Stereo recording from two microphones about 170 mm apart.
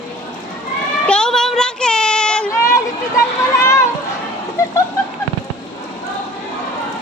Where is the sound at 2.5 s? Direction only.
15° left (ahead or behind).